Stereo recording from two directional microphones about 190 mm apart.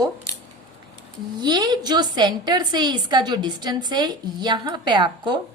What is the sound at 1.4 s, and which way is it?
A woman's voice, 25° right (ahead or behind).